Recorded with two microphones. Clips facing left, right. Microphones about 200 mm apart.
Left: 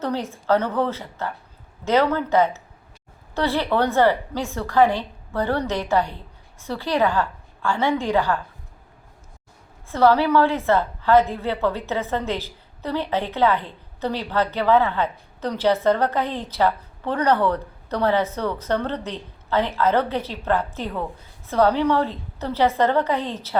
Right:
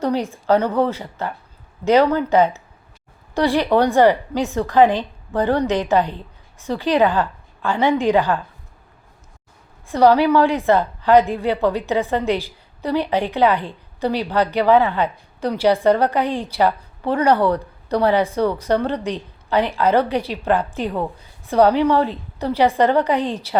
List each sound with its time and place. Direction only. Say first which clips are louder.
0.0 s a woman's voice: right 5 dB; 15° right (ahead or behind)
9.8 s a woman's voice: right 3 dB; 15° right (ahead or behind)